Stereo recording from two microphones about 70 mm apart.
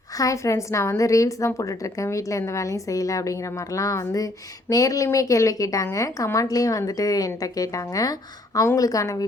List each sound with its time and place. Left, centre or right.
0.2 s a woman's voice: left